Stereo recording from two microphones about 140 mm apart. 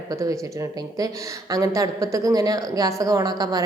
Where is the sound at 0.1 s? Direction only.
20° right (ahead or behind).